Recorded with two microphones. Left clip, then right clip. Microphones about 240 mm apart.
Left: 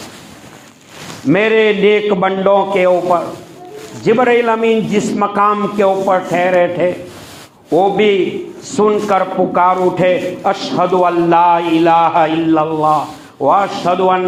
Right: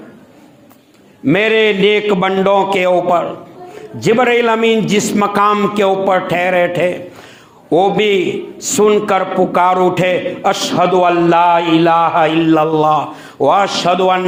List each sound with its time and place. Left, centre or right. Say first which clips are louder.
1.3 s a man's voice: even; right